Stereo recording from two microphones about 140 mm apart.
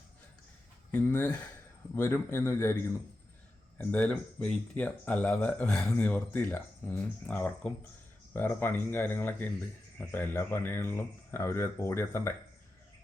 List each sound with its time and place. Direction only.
0.9 s a man's voice: 10° left (ahead or behind)
3.8 s speech: 10° left (ahead or behind)